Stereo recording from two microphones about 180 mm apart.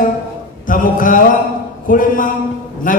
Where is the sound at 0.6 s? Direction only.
50° left (ahead or behind).